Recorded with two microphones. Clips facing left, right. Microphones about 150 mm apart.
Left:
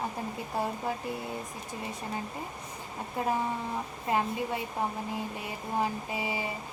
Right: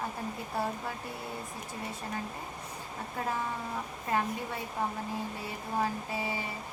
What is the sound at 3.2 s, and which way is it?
Speech, 15° left (ahead or behind).